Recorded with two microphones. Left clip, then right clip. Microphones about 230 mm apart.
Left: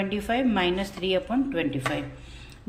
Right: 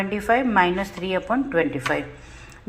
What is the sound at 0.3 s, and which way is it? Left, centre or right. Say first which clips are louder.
A woman's voice: right 7 dB; centre.